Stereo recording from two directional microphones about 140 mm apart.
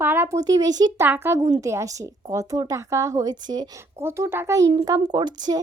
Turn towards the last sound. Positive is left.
turn(degrees=-30)  # may be behind; listen again after turning